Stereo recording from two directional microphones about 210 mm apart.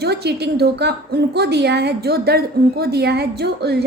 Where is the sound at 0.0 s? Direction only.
50° right (ahead or behind).